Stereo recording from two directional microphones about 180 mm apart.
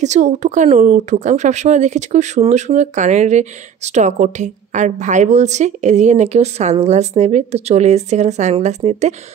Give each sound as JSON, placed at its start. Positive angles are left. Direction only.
{"t": 0.0, "sound": "speech", "side_deg": -40}